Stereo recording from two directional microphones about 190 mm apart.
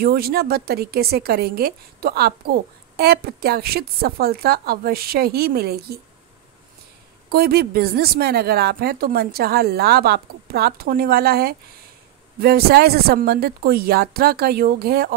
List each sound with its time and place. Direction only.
0.0 s a woman's voice: 55° right (ahead or behind)
7.2 s a woman's voice: 55° right (ahead or behind)